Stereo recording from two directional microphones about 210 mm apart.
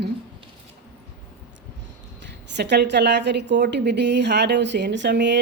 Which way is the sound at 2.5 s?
55° right (ahead or behind).